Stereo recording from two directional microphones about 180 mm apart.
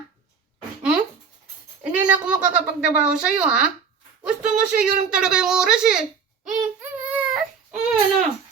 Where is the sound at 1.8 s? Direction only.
5° right (ahead or behind).